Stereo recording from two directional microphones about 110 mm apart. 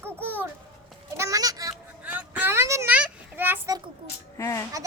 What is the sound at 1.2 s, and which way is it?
Goat, 30° right (ahead or behind).